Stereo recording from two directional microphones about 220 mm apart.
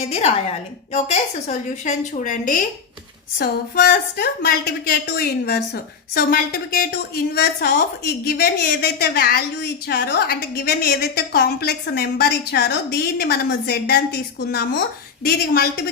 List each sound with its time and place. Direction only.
0.0 s a woman's voice: 30° left (ahead or behind); by 15.8 s 45° left (ahead or behind)